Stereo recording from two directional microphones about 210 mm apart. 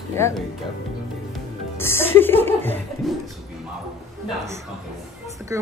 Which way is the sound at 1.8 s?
10° left (ahead or behind).